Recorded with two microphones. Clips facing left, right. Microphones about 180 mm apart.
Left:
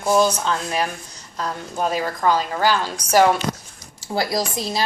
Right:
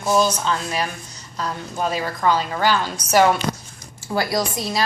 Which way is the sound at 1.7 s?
45° left (ahead or behind).